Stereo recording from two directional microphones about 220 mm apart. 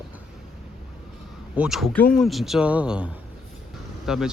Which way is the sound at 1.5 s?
5° right (ahead or behind).